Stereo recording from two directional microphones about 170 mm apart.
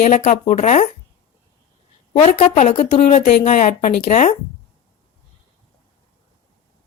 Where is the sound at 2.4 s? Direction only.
40° left (ahead or behind).